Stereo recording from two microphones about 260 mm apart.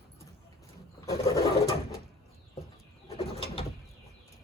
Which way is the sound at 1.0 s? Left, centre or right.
Centre.